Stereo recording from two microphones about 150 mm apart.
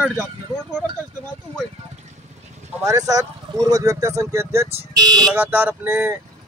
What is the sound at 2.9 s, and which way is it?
Speech, 25° right (ahead or behind).